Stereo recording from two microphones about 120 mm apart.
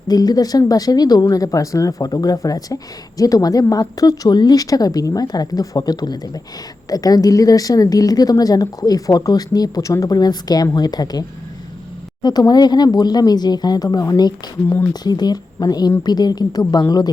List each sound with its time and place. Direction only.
0.1 s speech: 30° left (ahead or behind)